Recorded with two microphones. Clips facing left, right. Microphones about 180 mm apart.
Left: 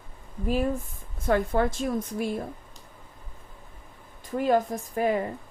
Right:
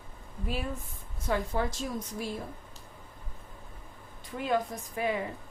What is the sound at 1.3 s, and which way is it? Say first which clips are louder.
Speech: left 7 dB; 55° left (ahead or behind).